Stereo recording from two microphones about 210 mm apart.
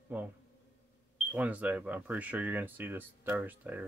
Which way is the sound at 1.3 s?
5° right (ahead or behind).